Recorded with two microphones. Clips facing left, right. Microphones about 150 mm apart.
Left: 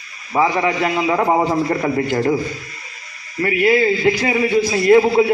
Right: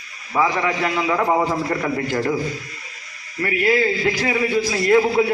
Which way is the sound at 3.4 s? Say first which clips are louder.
Left 4 dB; 20° left (ahead or behind).